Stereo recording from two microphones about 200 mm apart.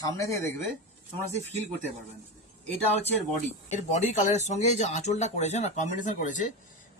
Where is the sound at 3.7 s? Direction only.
35° left (ahead or behind).